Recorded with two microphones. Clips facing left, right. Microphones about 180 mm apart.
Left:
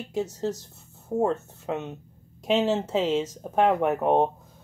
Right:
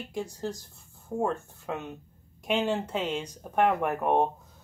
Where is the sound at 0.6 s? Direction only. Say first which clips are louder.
Left 4 dB; 20° left (ahead or behind).